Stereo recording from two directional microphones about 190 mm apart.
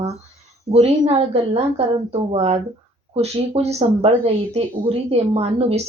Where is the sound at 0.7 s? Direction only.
35° right (ahead or behind).